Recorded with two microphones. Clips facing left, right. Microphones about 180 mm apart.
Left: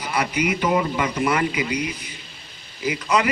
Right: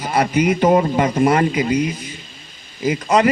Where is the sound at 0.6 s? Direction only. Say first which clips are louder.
Right 7 dB; 40° right (ahead or behind).